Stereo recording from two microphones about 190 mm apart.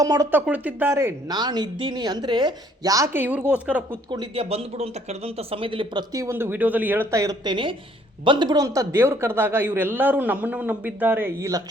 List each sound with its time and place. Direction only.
0.0 s a woman's voice: 15° right (ahead or behind)
4.1 s a woman's voice: 25° right (ahead or behind)